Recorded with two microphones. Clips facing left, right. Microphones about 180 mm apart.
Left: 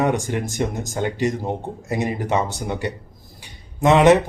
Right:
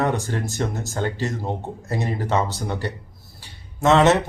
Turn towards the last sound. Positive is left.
turn(degrees=15)  # may be behind; listen again after turning